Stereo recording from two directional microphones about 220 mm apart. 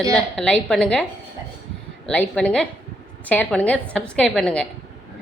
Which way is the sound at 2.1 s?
5° left (ahead or behind).